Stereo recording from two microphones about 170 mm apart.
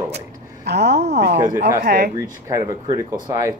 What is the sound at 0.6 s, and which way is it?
Speech, 75° right (ahead or behind).